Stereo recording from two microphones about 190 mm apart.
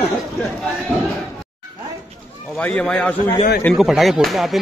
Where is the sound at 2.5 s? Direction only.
5° left (ahead or behind).